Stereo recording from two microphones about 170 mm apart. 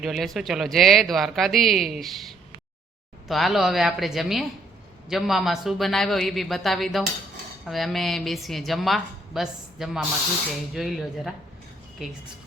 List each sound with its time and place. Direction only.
0.0 s a woman's voice: 5° right (ahead or behind)